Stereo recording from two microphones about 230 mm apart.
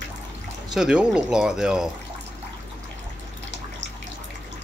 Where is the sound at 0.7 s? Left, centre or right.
Centre.